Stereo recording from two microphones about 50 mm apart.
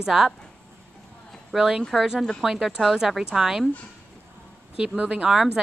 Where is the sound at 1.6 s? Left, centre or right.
Centre.